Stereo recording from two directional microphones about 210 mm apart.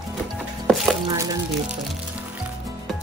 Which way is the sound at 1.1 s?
15° right (ahead or behind).